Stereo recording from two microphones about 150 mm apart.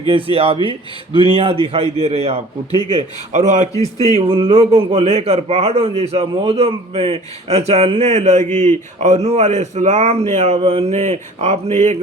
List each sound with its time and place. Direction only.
0.1 s a man's voice: 35° right (ahead or behind)
2.7 s speech: 30° left (ahead or behind)
3.3 s a man's voice: 55° right (ahead or behind)